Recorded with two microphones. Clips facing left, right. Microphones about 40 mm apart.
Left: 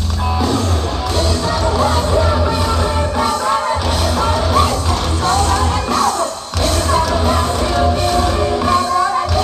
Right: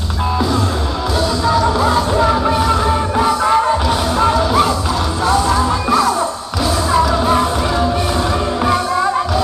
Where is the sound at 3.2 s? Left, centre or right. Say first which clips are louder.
Right 4 dB; right.